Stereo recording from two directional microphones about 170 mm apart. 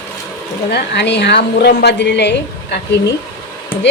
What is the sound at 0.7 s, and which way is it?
Speech, 90° left.